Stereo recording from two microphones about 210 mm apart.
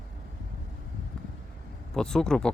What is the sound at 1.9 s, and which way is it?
Speech, 5° left (ahead or behind).